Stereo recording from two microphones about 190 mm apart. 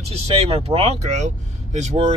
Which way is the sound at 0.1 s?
30° right (ahead or behind).